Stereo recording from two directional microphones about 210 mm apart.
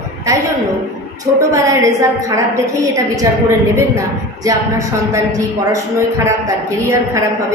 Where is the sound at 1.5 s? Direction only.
15° right (ahead or behind).